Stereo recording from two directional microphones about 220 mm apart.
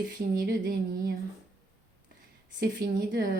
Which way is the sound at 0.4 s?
45° right (ahead or behind).